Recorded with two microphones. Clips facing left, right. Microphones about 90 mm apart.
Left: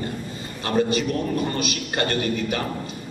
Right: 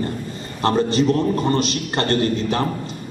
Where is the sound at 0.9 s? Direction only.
30° right (ahead or behind).